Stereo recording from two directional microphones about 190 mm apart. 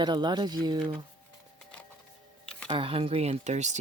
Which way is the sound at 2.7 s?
25° right (ahead or behind).